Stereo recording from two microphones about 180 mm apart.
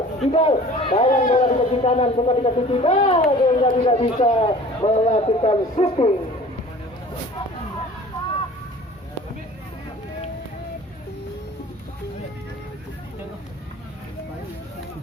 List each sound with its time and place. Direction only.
0.3 s speech: 30° left (ahead or behind)